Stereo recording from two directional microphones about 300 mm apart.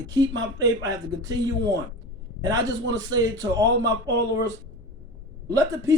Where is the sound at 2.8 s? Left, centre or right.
Right.